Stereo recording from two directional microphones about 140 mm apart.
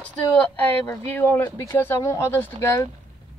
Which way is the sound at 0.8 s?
15° left (ahead or behind).